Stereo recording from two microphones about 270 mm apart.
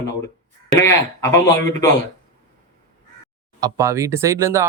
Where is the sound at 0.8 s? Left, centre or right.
Centre.